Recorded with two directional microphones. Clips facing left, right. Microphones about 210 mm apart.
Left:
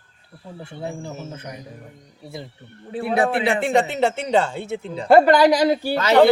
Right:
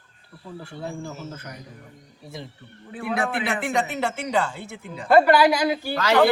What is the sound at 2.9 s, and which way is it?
Speech, 30° left (ahead or behind).